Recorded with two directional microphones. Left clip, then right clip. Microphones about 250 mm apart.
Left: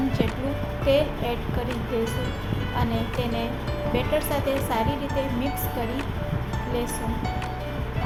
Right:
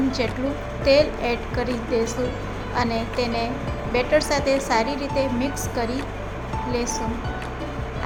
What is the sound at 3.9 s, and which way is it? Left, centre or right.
Music, right.